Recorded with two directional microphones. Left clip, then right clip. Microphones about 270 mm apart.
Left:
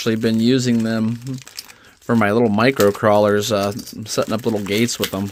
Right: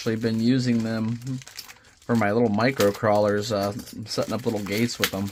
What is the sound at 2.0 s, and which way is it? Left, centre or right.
Speech, left.